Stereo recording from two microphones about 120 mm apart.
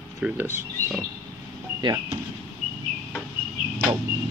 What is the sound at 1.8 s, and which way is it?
Speech, 40° right (ahead or behind).